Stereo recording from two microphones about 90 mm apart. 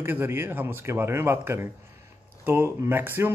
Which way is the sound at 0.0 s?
25° right (ahead or behind).